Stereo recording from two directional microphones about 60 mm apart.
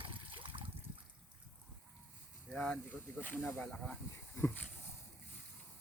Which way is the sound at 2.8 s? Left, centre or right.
Left.